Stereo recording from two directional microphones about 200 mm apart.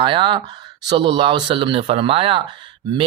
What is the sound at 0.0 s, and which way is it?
Speech, 25° right (ahead or behind).